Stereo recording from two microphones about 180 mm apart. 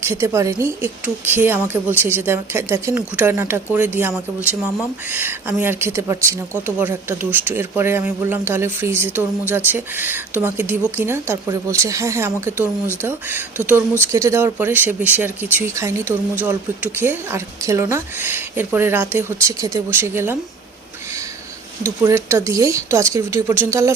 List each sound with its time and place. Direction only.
0.0 s speech: 15° right (ahead or behind)
5.1 s speech: 10° right (ahead or behind)
21.8 s speech: 15° right (ahead or behind)